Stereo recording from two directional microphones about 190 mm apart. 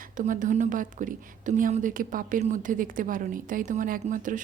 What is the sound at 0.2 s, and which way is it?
A woman's voice, 40° right (ahead or behind).